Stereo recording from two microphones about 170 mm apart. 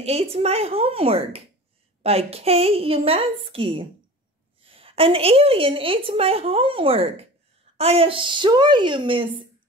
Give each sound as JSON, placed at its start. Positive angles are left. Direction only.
{"t": 0.0, "sound": "a woman's voice", "side_deg": -35}